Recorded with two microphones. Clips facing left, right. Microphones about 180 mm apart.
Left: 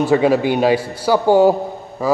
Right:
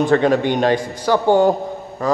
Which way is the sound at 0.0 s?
5° left (ahead or behind).